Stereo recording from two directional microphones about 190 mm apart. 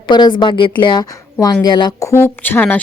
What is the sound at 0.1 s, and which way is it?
A woman's voice, 25° left (ahead or behind).